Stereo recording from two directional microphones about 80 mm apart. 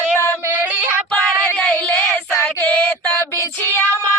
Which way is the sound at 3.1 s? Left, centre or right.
Left.